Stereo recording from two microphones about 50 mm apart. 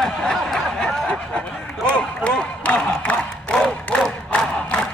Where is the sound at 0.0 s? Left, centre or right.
Centre; by 3.2 s left.